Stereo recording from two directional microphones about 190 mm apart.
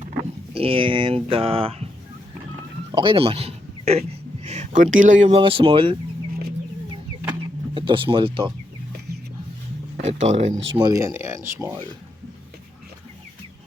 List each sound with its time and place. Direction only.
0.5 s speech: 30° right (ahead or behind)
2.9 s speech: 25° right (ahead or behind)
5.3 s speech: 30° right (ahead or behind)
7.3 s a sound: 25° right (ahead or behind)
10.0 s speech: 35° right (ahead or behind)
10.8 s speech: 20° right (ahead or behind)